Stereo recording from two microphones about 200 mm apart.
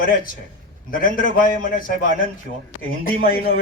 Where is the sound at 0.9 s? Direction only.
45° left (ahead or behind).